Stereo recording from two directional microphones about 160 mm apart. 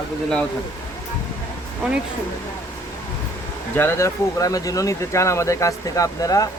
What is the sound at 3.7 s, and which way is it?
Speech, 15° left (ahead or behind).